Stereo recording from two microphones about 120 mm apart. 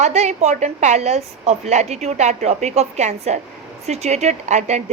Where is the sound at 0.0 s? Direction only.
70° right (ahead or behind).